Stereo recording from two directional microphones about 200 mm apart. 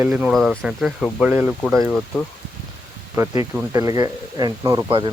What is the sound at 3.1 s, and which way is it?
Speech, 15° right (ahead or behind).